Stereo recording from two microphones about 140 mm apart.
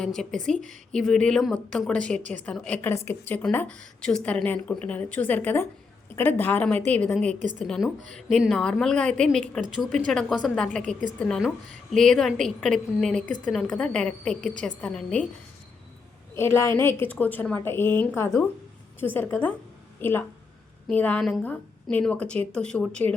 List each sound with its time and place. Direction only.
0.0 s a woman's voice: 5° left (ahead or behind)
16.3 s a woman's voice: 20° left (ahead or behind)